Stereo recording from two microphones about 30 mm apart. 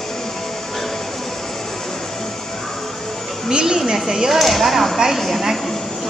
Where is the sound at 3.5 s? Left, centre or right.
Right.